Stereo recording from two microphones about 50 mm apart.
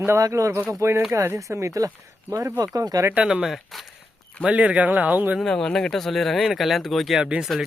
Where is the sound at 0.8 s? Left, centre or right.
Right.